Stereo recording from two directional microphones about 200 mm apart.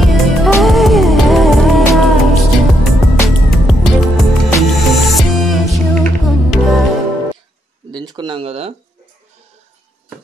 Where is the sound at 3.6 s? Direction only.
Centre (ahead or behind).